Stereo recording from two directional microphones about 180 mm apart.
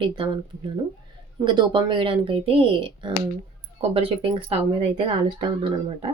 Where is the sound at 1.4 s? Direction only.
25° right (ahead or behind).